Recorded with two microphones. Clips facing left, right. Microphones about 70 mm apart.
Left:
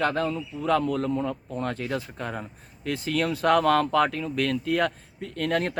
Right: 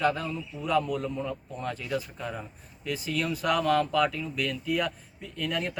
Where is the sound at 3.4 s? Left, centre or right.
Left.